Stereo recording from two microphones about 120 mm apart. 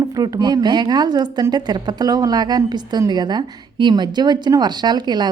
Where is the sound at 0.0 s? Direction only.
35° right (ahead or behind).